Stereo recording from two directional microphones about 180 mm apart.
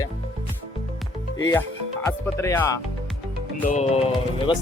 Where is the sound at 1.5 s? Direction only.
10° left (ahead or behind).